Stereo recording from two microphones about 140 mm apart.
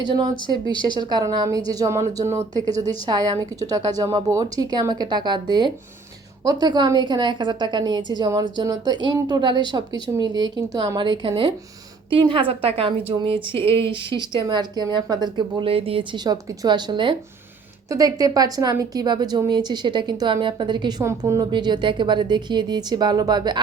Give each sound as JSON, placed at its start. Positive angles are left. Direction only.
{"t": 0.0, "sound": "a woman's voice", "side_deg": -30}
{"t": 2.2, "sound": "speech", "side_deg": -50}
{"t": 2.5, "sound": "a woman's voice", "side_deg": -25}
{"t": 21.0, "sound": "speech", "side_deg": -20}